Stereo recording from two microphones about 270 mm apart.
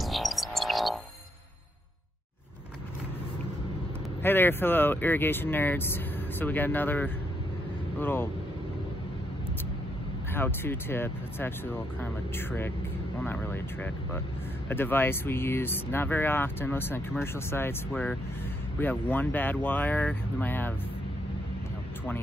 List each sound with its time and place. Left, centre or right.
0.0 s music: centre
4.2 s speech: centre
10.3 s speech: centre